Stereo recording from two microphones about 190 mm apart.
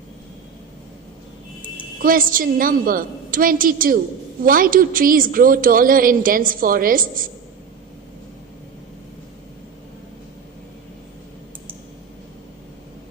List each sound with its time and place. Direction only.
2.0 s a woman's voice: 50° right (ahead or behind)